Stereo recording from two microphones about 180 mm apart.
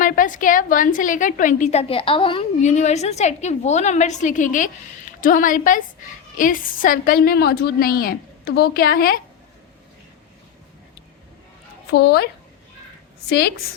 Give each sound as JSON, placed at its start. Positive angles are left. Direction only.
{"t": 0.0, "sound": "a woman's voice", "side_deg": 50}
{"t": 11.9, "sound": "a woman's voice", "side_deg": 65}